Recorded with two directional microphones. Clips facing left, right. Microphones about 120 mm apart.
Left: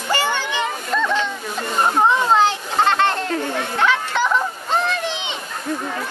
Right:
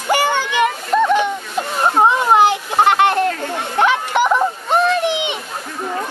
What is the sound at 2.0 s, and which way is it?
Children playing, 15° right (ahead or behind).